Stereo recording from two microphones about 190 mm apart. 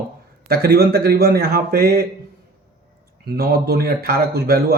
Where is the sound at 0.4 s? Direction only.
55° right (ahead or behind).